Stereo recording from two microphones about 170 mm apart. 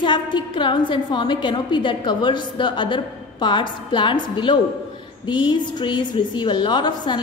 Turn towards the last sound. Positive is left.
turn(degrees=25)  # may be behind; listen again after turning